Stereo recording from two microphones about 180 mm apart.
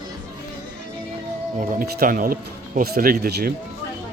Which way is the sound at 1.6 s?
50° right (ahead or behind).